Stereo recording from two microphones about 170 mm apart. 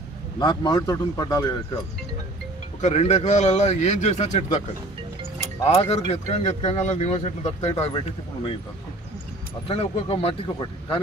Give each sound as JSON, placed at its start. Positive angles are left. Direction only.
{"t": 0.4, "sound": "speech", "side_deg": 25}
{"t": 2.8, "sound": "speech", "side_deg": 40}
{"t": 5.7, "sound": "speech", "side_deg": 40}
{"t": 9.7, "sound": "speech", "side_deg": 35}